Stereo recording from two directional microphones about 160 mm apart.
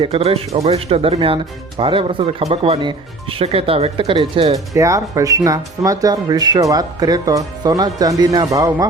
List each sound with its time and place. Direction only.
0.0 s speech: 35° right (ahead or behind)
4.5 s speech: 20° right (ahead or behind)